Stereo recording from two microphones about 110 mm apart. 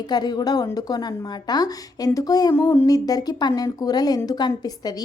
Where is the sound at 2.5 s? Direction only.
20° left (ahead or behind).